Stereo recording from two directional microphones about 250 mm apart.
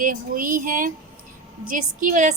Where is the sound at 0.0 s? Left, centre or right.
Right.